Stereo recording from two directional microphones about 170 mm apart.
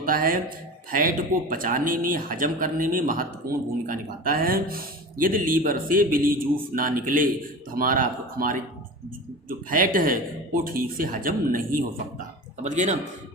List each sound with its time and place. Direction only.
0.0 s speech: 55° right (ahead or behind)
12.6 s speech: 45° right (ahead or behind)